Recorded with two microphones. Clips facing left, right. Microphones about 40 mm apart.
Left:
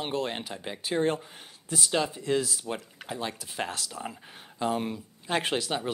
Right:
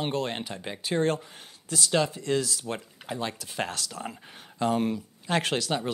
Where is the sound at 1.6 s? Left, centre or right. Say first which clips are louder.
Right 1 dB; right.